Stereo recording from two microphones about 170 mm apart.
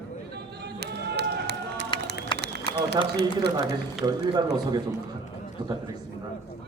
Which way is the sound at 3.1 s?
75° right (ahead or behind).